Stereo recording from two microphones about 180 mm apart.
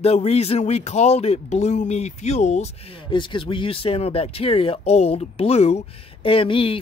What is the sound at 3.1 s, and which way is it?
Speech, 30° left (ahead or behind).